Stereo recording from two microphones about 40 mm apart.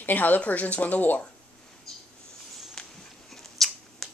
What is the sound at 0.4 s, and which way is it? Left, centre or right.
Speech, left.